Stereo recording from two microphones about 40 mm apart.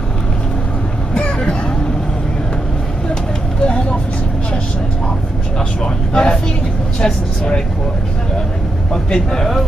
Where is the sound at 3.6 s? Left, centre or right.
Left.